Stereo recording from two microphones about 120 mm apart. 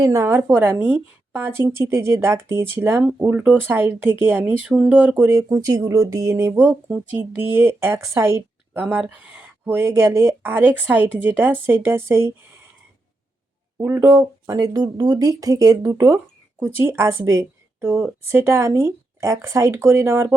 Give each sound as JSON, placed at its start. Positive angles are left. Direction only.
{"t": 0.0, "sound": "a woman's voice", "side_deg": -25}
{"t": 6.6, "sound": "a woman's voice", "side_deg": -15}
{"t": 13.7, "sound": "a woman's voice", "side_deg": -20}